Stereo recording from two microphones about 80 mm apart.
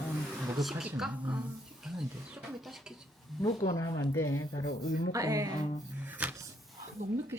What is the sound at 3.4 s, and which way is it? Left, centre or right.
Speech, left.